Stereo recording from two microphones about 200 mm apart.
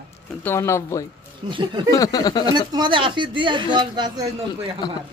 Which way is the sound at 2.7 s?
25° right (ahead or behind).